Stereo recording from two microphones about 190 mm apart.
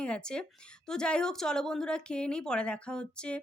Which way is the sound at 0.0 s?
5° left (ahead or behind).